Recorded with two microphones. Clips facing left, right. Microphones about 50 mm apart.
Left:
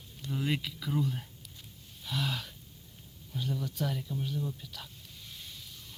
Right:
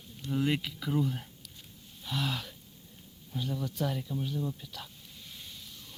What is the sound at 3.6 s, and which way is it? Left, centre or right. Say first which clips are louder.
Speech: right 2 dB; right.